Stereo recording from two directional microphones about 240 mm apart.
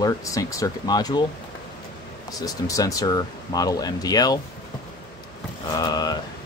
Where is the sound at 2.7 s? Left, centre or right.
Centre.